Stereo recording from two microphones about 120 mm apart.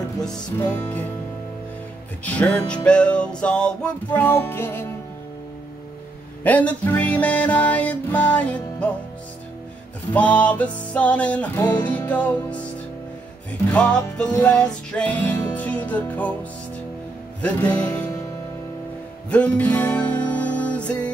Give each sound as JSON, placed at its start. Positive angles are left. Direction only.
{"t": 0.6, "sound": "music", "side_deg": 15}
{"t": 2.2, "sound": "music", "side_deg": 10}
{"t": 6.4, "sound": "music", "side_deg": 15}
{"t": 10.1, "sound": "music", "side_deg": 10}
{"t": 13.7, "sound": "music", "side_deg": 10}
{"t": 17.4, "sound": "music", "side_deg": 10}
{"t": 19.3, "sound": "music", "side_deg": 10}